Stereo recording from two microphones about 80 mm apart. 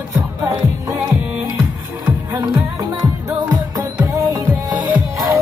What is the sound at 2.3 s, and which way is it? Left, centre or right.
Music, right.